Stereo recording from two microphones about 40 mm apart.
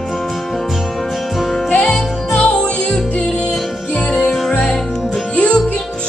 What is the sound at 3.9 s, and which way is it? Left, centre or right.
Music, left.